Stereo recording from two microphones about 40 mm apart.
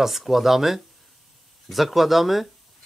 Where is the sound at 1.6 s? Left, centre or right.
Centre.